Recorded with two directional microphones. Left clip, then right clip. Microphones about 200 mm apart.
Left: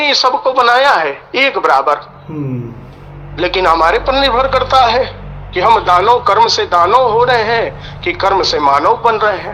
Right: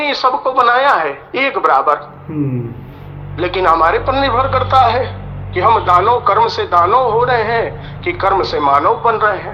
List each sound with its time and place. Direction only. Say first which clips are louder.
0.0 s a man's voice: left 3 dB; 15° left (ahead or behind)
3.3 s a man's voice: left 1 dB; 15° left (ahead or behind)